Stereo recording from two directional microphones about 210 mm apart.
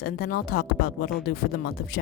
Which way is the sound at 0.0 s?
45° left (ahead or behind).